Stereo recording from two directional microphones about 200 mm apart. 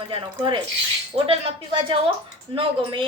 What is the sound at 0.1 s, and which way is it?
A woman's voice, 25° right (ahead or behind).